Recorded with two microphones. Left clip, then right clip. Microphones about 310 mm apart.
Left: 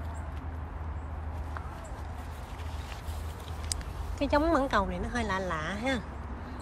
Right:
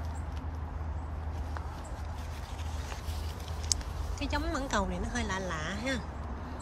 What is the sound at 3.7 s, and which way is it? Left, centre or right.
A woman's voice, centre.